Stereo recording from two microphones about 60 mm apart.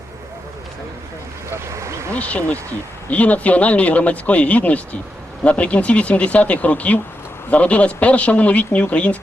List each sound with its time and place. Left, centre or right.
1.5 s vehicle: right
2.1 s speech: left